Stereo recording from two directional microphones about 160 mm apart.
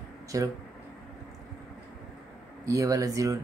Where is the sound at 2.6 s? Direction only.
20° right (ahead or behind).